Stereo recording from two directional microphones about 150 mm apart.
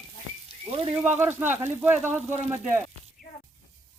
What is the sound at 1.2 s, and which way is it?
Speech, 15° right (ahead or behind).